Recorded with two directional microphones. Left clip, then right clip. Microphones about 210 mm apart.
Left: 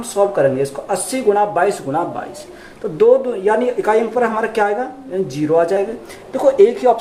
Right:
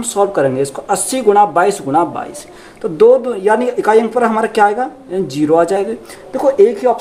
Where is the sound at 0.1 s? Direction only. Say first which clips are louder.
Right 1 dB; 50° right (ahead or behind).